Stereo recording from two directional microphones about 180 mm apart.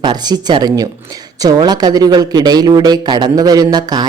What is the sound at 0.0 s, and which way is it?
Speech, 25° right (ahead or behind).